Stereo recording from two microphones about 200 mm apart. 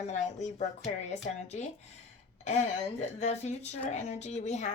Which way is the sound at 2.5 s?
35° left (ahead or behind).